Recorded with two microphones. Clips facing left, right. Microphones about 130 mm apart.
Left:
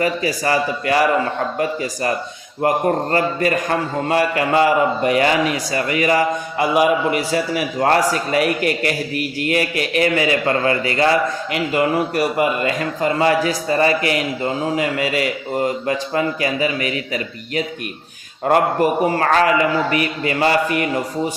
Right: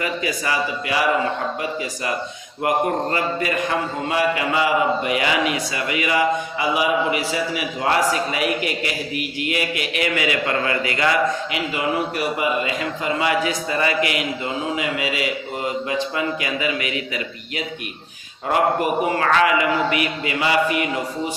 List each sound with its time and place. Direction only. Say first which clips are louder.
0.0 s a man's voice: left 5 dB; 40° left (ahead or behind)
11.5 s a man's voice: left 5 dB; 50° left (ahead or behind)